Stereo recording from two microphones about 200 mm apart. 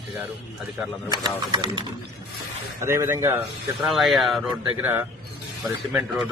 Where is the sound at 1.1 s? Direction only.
20° right (ahead or behind).